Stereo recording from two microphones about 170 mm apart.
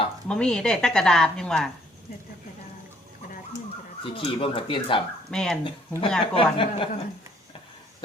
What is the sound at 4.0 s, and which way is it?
Speech, 30° left (ahead or behind).